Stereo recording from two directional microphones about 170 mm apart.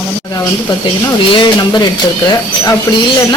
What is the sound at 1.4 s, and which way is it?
Speech, 25° left (ahead or behind).